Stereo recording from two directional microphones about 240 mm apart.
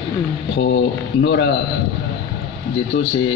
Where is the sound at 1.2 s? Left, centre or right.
Left.